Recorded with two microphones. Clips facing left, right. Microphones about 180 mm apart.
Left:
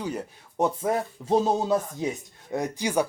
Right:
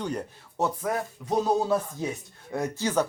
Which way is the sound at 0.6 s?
25° left (ahead or behind).